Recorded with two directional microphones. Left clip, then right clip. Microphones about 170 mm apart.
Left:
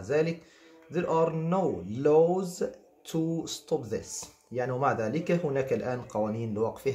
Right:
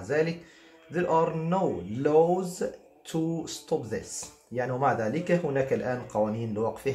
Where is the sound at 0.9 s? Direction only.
25° left (ahead or behind).